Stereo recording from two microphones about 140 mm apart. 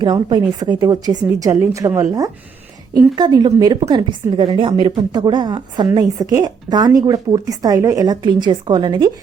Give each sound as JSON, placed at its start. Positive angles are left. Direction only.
{"t": 0.0, "sound": "a woman's voice", "side_deg": -30}